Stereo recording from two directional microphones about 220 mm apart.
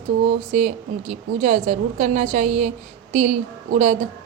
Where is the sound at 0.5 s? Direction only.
30° right (ahead or behind).